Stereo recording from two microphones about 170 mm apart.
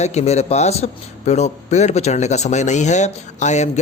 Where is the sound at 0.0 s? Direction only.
40° left (ahead or behind).